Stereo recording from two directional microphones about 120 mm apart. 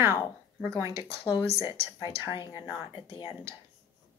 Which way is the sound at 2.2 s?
40° left (ahead or behind).